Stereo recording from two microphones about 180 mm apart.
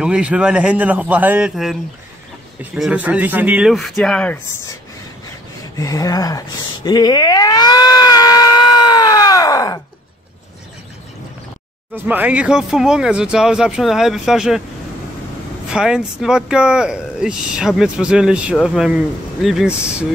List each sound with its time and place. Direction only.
0.0 s a man's voice: 5° right (ahead or behind)
5.8 s a sound: 20° left (ahead or behind)
12.1 s speech: 10° right (ahead or behind)
15.7 s speech: 5° right (ahead or behind)